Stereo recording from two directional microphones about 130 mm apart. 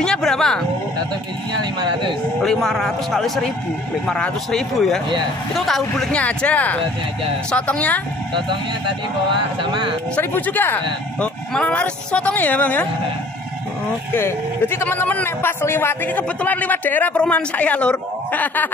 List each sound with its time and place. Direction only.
0.0 s a man's voice: 5° left (ahead or behind)
1.6 s speech: 35° right (ahead or behind)
2.4 s a man's voice: 5° left (ahead or behind)
9.3 s speech: 40° right (ahead or behind)
10.1 s a man's voice: 15° left (ahead or behind)
14.1 s a man's voice: 20° left (ahead or behind)